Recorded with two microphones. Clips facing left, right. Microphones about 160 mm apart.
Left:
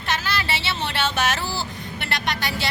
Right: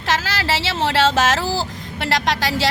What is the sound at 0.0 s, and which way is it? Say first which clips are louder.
Speech: right 4 dB; 90° right.